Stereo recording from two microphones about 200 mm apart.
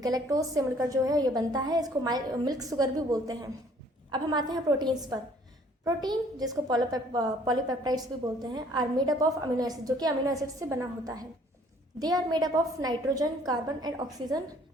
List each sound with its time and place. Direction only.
0.0 s a woman's voice: 15° right (ahead or behind)